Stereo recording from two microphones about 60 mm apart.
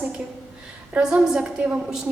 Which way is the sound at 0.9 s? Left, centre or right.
Centre.